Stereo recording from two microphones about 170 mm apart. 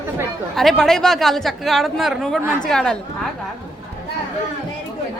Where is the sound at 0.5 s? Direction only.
Centre (ahead or behind).